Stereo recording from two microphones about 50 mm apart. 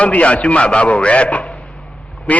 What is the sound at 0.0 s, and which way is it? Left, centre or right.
A man's voice, left.